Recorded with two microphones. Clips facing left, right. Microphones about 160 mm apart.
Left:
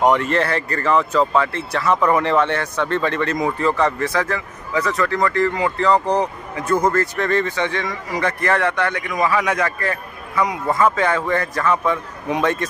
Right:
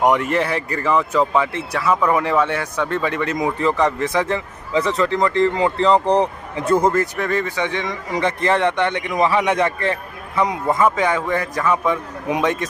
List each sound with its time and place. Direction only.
0.0 s speech: 15° right (ahead or behind); by 6.9 s 30° right (ahead or behind)
6.9 s speech: 15° right (ahead or behind)
10.8 s speech: 15° right (ahead or behind)